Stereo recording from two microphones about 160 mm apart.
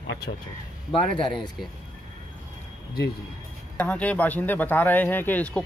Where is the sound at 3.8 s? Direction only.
10° left (ahead or behind).